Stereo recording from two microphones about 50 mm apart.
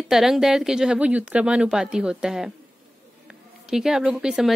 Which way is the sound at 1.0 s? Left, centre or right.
Right.